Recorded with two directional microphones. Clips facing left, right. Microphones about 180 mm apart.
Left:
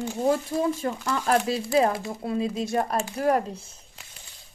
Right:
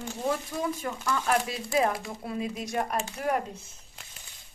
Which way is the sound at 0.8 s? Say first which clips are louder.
Left 3 dB; 30° left (ahead or behind).